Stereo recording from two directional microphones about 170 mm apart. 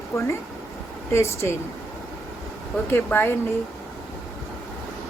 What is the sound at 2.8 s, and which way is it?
Speech, 10° left (ahead or behind).